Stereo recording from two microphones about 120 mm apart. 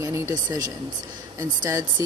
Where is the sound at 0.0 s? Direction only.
25° right (ahead or behind).